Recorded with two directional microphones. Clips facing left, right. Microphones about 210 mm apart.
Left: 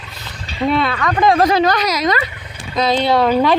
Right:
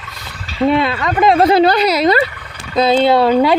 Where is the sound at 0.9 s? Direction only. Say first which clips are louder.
Right 2 dB; 25° right (ahead or behind).